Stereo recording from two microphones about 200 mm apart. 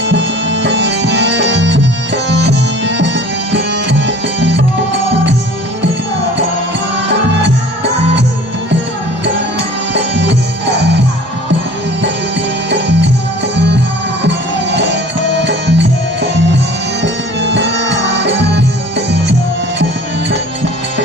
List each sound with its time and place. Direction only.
0.1 s music: 60° right (ahead or behind)
2.4 s tabla: 60° right (ahead or behind)
3.5 s music: 60° right (ahead or behind)
9.9 s music: 60° right (ahead or behind)
12.7 s music: 60° right (ahead or behind)
14.2 s music: 60° right (ahead or behind)